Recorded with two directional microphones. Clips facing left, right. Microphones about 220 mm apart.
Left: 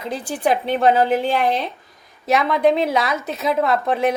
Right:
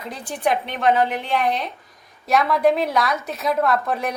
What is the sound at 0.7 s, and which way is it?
A woman's voice, 30° left (ahead or behind).